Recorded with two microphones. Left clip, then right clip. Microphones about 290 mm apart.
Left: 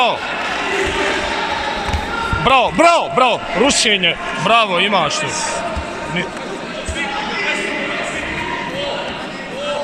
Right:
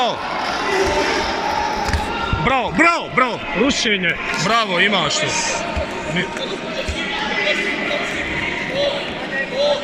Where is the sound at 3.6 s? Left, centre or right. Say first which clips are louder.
Left 5 dB; left.